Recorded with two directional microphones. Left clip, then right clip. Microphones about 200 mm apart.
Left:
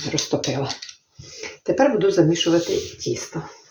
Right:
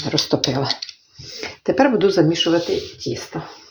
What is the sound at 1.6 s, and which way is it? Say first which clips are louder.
Speech: right 2 dB; 40° right (ahead or behind).